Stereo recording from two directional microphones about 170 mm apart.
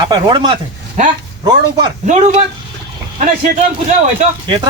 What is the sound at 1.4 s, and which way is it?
Speech, 25° right (ahead or behind).